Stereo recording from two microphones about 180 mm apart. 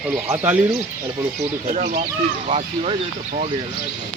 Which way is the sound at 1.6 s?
40° right (ahead or behind).